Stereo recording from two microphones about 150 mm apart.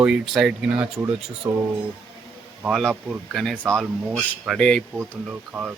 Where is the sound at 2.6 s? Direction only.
5° right (ahead or behind).